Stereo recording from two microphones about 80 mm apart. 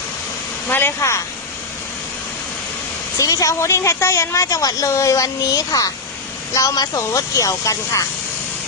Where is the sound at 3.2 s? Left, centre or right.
Left.